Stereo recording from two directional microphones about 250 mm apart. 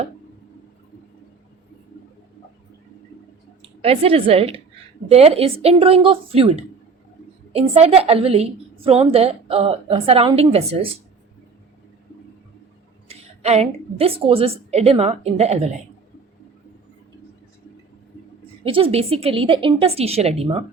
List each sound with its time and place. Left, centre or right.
3.6 s a woman's voice: right
7.5 s a woman's voice: right
13.1 s a woman's voice: right
18.6 s a woman's voice: right